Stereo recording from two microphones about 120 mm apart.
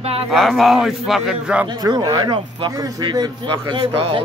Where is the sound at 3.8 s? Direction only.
50° right (ahead or behind).